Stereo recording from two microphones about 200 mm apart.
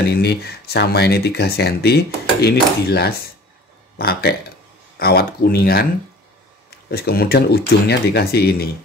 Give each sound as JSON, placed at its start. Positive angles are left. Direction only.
{"t": 0.1, "sound": "speech", "side_deg": 55}
{"t": 6.9, "sound": "speech", "side_deg": 50}